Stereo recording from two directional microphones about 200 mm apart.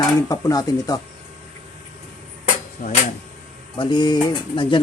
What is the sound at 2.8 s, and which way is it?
Speech, 45° left (ahead or behind).